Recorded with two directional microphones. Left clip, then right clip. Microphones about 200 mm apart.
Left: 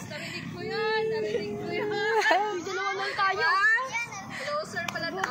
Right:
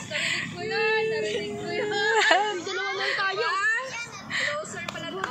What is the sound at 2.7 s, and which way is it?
Children playing, 55° left (ahead or behind).